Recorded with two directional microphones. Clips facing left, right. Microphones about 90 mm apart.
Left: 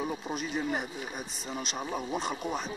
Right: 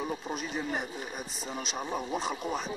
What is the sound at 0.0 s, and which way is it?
Speech, centre (ahead or behind).